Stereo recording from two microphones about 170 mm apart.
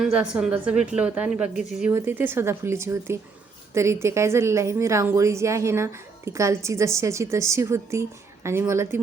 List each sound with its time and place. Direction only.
0.0 s a woman's voice: 5° right (ahead or behind)